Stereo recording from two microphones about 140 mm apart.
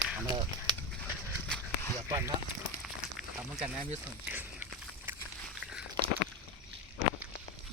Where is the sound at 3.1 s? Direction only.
5° right (ahead or behind).